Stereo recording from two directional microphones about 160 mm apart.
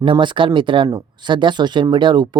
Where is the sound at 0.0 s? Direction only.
30° right (ahead or behind).